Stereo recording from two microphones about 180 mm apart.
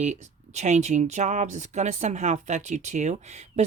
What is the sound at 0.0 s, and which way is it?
Speech, 40° right (ahead or behind).